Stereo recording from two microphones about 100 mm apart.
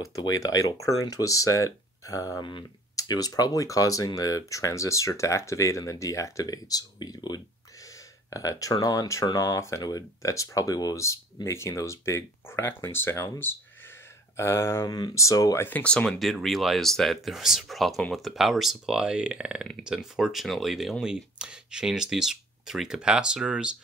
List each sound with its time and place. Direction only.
0.2 s speech: 40° left (ahead or behind)
15.6 s speech: 15° left (ahead or behind); by 23.7 s 10° right (ahead or behind)